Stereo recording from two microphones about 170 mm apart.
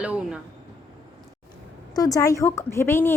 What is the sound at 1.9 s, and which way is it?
A woman's voice, 20° left (ahead or behind).